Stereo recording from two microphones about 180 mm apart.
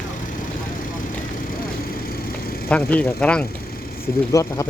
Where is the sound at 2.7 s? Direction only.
10° left (ahead or behind).